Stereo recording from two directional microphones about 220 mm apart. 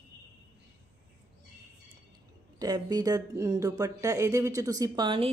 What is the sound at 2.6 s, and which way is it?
Speech, 15° right (ahead or behind).